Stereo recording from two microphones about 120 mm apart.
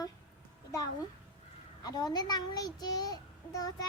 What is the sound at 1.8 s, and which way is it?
A child's voice, 35° left (ahead or behind).